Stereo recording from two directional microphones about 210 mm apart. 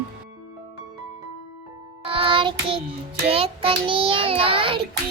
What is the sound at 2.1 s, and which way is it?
Child singing, 25° right (ahead or behind).